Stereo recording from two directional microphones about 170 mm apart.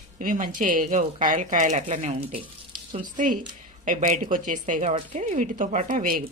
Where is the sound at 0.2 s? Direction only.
55° right (ahead or behind).